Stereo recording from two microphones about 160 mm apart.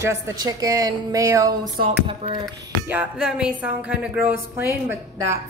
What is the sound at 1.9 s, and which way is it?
Speech, 40° right (ahead or behind).